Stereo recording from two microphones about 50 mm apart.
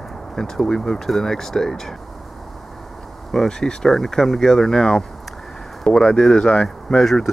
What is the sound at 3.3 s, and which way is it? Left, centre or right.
Speech, centre.